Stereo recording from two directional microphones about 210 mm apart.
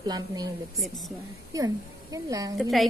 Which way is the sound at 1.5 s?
15° right (ahead or behind).